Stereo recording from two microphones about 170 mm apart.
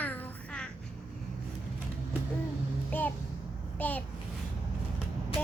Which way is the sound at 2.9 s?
10° left (ahead or behind).